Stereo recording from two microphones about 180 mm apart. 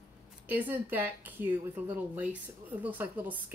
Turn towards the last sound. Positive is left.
turn(degrees=-10)  # may be behind; listen again after turning